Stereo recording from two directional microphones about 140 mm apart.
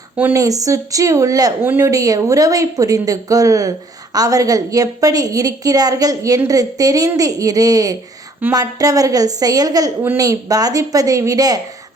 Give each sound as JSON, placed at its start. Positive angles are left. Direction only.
{"t": 0.2, "sound": "speech", "side_deg": -15}
{"t": 0.4, "sound": "a woman's voice", "side_deg": -25}